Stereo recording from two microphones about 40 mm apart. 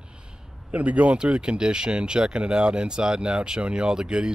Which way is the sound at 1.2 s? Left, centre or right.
Right.